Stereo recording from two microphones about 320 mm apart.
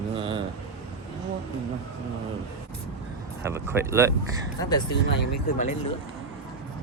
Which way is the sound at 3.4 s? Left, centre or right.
Centre.